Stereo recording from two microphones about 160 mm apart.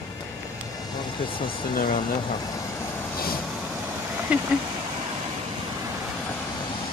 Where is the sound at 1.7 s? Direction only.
60° left (ahead or behind).